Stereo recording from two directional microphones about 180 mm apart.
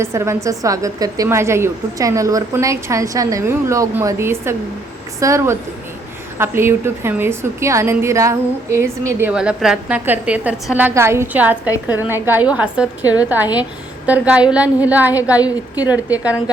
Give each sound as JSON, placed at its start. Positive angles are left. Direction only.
{"t": 0.0, "sound": "a woman's voice", "side_deg": -15}